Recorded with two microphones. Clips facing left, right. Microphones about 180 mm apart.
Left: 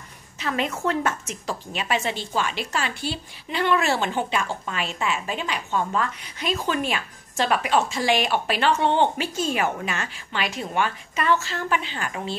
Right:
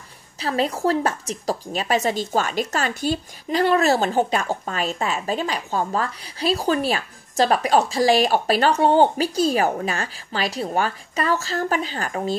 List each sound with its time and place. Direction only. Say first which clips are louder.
0.4 s a woman's voice: right 4 dB; 35° right (ahead or behind)